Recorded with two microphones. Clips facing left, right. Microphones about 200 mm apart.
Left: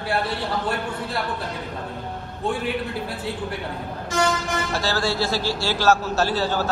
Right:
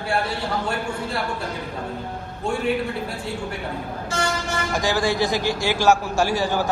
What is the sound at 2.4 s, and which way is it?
Speech, centre (ahead or behind).